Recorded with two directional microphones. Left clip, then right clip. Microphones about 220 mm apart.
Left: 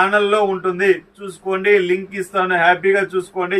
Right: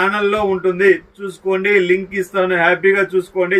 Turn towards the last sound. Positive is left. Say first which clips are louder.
# right 4 dB
turn(degrees=15)  # may be behind; listen again after turning